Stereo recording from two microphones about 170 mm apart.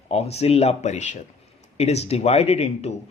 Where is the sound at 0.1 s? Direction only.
35° left (ahead or behind).